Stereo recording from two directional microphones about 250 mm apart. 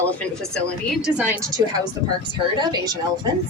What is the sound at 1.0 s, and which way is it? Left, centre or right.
Speech, centre.